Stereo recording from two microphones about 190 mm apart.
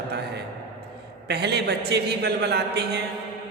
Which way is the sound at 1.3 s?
60° right (ahead or behind).